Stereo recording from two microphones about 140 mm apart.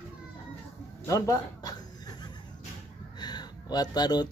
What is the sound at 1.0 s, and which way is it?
Chuckle, 25° left (ahead or behind).